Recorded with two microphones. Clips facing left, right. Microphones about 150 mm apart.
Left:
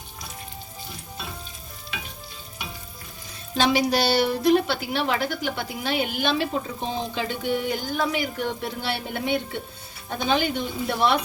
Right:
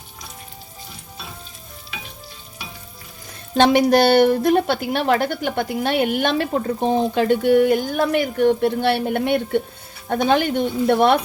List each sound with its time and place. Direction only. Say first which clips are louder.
3.6 s a woman's voice: right 7 dB; 55° right (ahead or behind)